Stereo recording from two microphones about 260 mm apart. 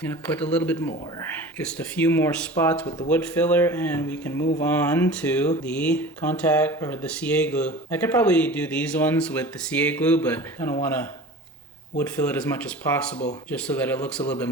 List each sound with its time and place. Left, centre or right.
0.0 s speech: centre
4.4 s speech: left
4.6 s speech: centre
13.5 s speech: centre